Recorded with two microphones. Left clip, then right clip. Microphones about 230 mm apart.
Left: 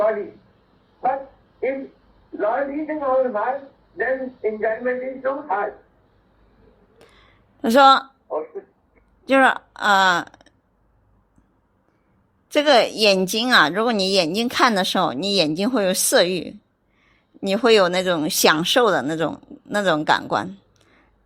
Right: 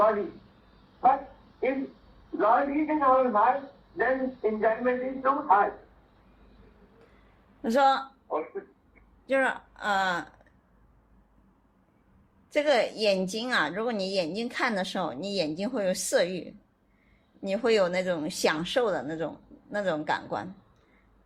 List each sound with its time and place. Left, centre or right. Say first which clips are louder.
2.4 s a man's voice: left 1 dB; right
7.6 s a woman's voice: left 10 dB; left
8.3 s speech: left 4 dB; right
9.2 s speech: left 10 dB; left
12.5 s a woman's voice: left 9 dB; left